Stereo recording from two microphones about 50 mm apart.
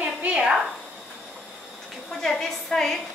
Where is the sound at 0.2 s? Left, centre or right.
Right.